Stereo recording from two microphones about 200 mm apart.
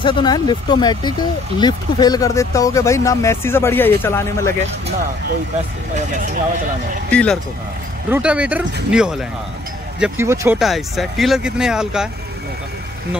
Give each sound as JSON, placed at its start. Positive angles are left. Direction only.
{"t": 0.0, "sound": "speech", "side_deg": 25}
{"t": 5.9, "sound": "speech", "side_deg": -40}
{"t": 7.1, "sound": "speech", "side_deg": 5}
{"t": 8.1, "sound": "speech", "side_deg": -5}
{"t": 10.6, "sound": "speech", "side_deg": 0}